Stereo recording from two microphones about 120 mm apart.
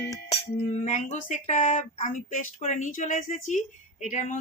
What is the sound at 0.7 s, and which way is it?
Speech, 70° left (ahead or behind).